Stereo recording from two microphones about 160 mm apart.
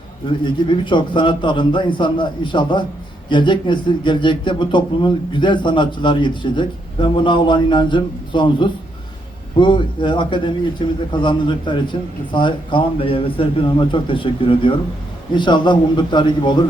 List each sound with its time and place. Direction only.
0.4 s a man's voice: 30° left (ahead or behind)